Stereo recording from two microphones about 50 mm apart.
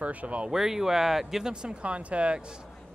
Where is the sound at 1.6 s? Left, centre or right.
Right.